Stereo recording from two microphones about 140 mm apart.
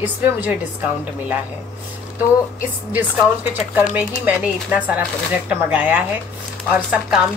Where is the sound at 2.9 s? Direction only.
10° right (ahead or behind).